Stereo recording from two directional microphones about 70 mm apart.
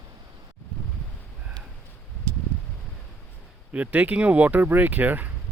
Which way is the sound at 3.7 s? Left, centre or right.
Right.